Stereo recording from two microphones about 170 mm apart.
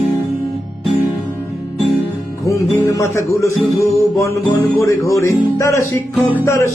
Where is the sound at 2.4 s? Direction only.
15° left (ahead or behind).